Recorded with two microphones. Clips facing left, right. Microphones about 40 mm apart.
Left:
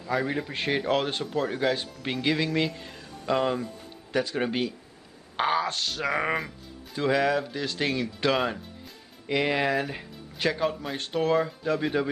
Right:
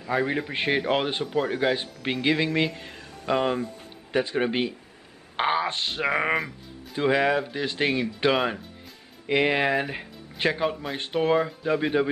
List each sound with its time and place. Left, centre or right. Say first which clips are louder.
0.0 s speech: right 2 dB; right
6.3 s music: right 3 dB; centre
7.0 s speech: right 2 dB; right
11.0 s speech: right 2 dB; right